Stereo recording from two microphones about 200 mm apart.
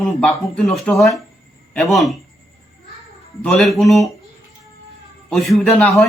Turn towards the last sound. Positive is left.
turn(degrees=0)  # may be behind; listen again after turning